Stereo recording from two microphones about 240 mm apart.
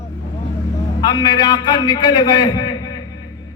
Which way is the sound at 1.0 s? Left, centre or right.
Centre.